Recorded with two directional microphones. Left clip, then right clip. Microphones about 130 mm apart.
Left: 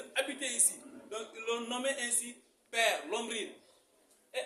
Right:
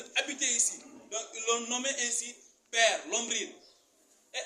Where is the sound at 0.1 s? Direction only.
25° left (ahead or behind).